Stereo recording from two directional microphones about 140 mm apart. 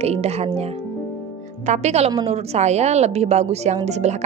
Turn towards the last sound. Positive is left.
turn(degrees=-55)  # may be behind; listen again after turning